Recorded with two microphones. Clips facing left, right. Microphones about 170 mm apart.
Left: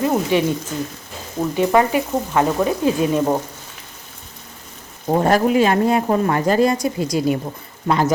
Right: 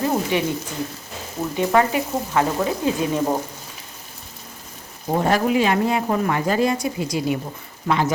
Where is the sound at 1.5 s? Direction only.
20° left (ahead or behind).